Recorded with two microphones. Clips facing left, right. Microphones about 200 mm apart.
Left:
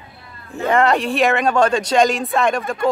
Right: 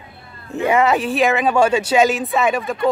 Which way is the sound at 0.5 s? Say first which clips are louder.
Even; 15° right (ahead or behind).